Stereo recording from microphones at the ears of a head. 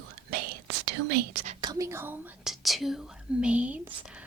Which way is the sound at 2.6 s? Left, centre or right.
Centre.